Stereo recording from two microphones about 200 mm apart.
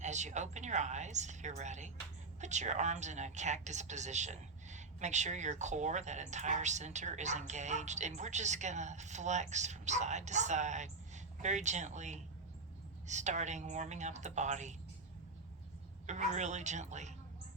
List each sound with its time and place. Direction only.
0.0 s a woman's voice: 35° right (ahead or behind)
16.0 s a woman's voice: 35° right (ahead or behind)